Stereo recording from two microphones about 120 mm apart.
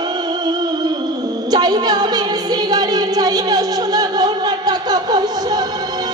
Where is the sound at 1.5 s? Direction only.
35° right (ahead or behind).